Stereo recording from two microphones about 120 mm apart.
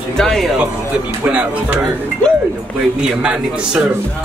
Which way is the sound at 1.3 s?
10° right (ahead or behind).